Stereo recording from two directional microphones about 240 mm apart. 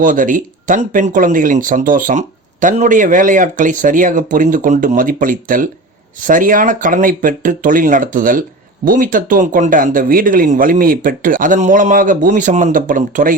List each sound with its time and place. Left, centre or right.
0.0 s speech: right